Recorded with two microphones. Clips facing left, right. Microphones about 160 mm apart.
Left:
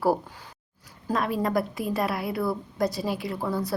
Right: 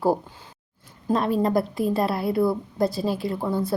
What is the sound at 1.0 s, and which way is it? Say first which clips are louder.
A woman's voice: right 4 dB; 25° right (ahead or behind).